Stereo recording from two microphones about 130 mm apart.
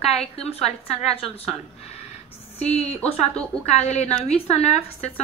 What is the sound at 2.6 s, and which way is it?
A woman's voice, 55° left (ahead or behind).